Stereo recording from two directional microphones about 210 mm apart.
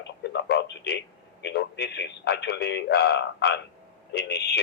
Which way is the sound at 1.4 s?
55° left (ahead or behind).